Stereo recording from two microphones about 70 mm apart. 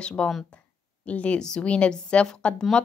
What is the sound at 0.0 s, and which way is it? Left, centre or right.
A woman's voice, centre.